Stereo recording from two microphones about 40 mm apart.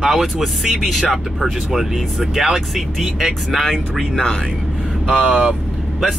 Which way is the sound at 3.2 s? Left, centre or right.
Centre.